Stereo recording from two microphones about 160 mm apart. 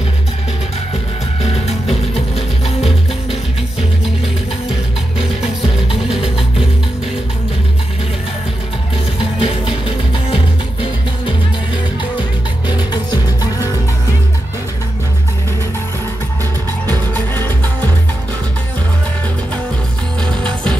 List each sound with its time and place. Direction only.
1.4 s music: 40° left (ahead or behind)
9.4 s music: 35° left (ahead or behind)
11.7 s music: 30° left (ahead or behind)
16.8 s music: 10° left (ahead or behind)